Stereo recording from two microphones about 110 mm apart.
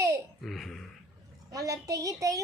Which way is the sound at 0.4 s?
Centre (ahead or behind).